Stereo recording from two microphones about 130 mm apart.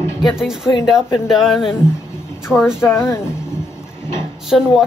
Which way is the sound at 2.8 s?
20° left (ahead or behind).